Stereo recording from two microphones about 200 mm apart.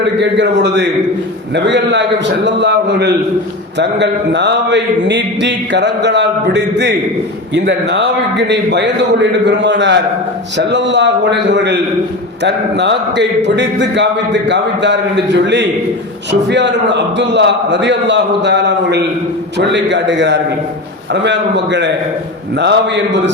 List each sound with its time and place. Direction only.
0.0 s a man's voice: 60° right (ahead or behind)